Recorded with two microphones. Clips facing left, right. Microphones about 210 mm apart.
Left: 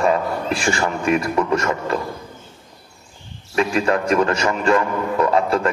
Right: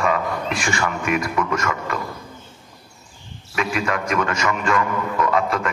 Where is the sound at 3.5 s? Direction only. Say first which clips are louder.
Left 5 dB; 30° left (ahead or behind).